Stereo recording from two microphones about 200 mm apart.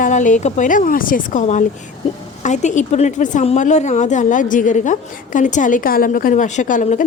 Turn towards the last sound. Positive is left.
turn(degrees=40)  # may be behind; listen again after turning